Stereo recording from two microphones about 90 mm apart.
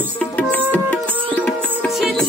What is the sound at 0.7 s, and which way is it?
Music, 15° left (ahead or behind).